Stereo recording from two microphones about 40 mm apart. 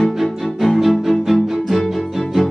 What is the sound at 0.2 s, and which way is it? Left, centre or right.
Music, centre.